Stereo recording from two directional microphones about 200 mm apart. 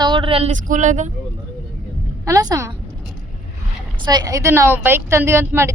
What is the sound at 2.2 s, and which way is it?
Speech, 15° right (ahead or behind).